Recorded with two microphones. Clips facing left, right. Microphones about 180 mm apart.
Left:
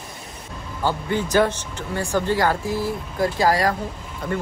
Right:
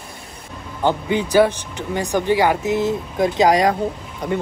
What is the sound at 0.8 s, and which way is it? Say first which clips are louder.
Speech: right 4 dB; 15° right (ahead or behind).